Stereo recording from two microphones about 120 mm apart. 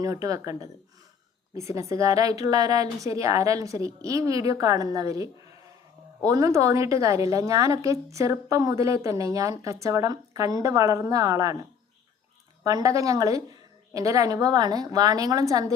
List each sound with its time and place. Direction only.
0.0 s a woman's voice: 30° right (ahead or behind)
1.5 s a woman's voice: 25° right (ahead or behind)
12.6 s a woman's voice: 25° right (ahead or behind)